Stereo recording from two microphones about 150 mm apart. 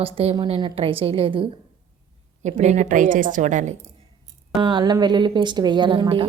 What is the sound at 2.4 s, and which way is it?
A woman's voice, 50° right (ahead or behind).